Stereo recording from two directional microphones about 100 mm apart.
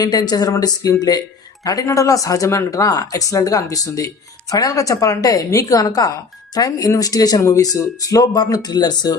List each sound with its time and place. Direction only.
0.0 s speech: 40° left (ahead or behind)